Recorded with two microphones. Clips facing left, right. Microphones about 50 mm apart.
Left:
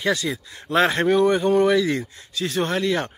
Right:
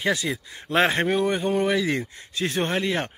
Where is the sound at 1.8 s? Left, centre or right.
Right.